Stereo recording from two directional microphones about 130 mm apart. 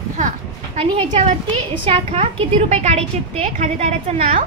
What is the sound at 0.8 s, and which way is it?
A woman's voice, 45° right (ahead or behind).